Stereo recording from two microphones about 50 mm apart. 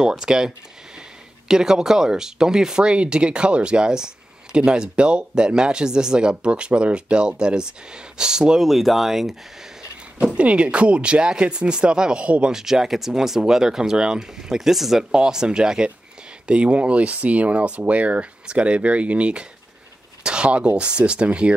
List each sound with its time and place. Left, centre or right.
0.0 s speech: centre
1.5 s speech: centre
8.5 s speech: centre
10.3 s speech: right
12.5 s speech: centre